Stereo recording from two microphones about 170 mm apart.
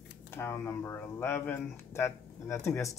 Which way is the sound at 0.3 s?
15° left (ahead or behind).